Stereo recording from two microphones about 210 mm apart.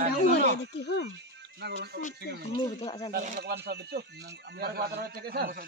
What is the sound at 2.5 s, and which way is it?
Speech, 20° left (ahead or behind).